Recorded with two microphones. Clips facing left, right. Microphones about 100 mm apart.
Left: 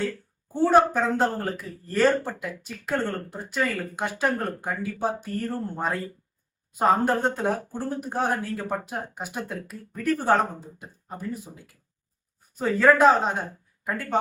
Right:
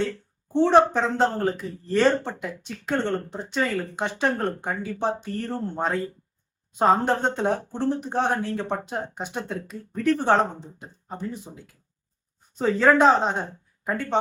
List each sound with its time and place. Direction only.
0.7 s speech: 5° left (ahead or behind)
2.1 s speech: 25° right (ahead or behind)
2.4 s speech: 5° left (ahead or behind)
5.5 s speech: 25° right (ahead or behind)
5.8 s speech: 5° left (ahead or behind)